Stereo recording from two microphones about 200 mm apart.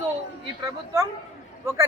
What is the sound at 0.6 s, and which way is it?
Speech, 15° right (ahead or behind).